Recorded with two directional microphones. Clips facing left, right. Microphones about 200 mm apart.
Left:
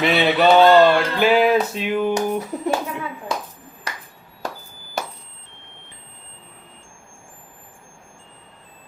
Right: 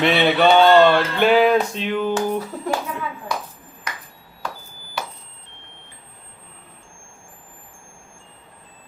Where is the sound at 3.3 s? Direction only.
25° left (ahead or behind).